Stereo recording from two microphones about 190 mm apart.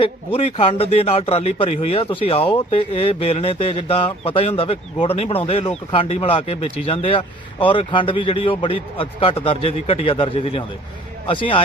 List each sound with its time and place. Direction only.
0.0 s a man's voice: 30° left (ahead or behind)